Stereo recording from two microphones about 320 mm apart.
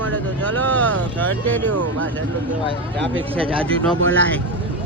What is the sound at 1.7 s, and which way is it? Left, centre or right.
Speech, right.